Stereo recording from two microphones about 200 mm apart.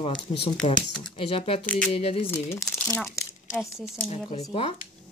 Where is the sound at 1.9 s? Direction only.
30° left (ahead or behind).